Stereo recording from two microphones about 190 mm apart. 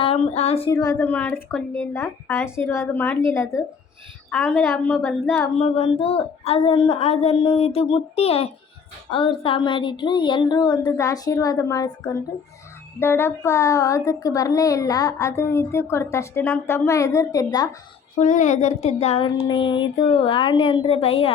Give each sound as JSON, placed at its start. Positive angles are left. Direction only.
{"t": 0.0, "sound": "a sound", "side_deg": 30}
{"t": 0.7, "sound": "a child's voice", "side_deg": 15}
{"t": 5.5, "sound": "a woman's voice", "side_deg": 30}
{"t": 13.0, "sound": "a child's voice", "side_deg": 10}
{"t": 18.2, "sound": "a woman's voice", "side_deg": 40}